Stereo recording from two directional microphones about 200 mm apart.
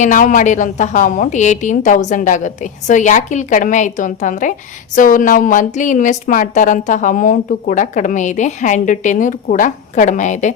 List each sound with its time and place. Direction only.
0.0 s a woman's voice: 40° left (ahead or behind)